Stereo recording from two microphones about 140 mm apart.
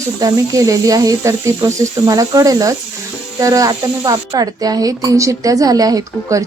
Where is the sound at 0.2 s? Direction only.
25° right (ahead or behind).